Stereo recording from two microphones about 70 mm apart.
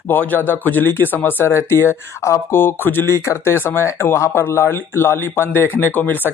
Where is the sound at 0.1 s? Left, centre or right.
Left.